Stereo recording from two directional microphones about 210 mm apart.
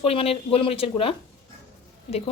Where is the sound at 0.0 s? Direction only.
25° left (ahead or behind).